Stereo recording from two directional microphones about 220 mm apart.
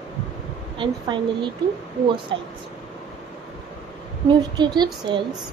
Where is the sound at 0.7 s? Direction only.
20° right (ahead or behind).